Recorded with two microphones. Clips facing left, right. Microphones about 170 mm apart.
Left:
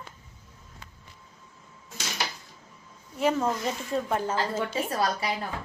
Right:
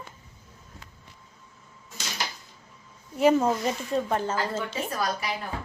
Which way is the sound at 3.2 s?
10° right (ahead or behind).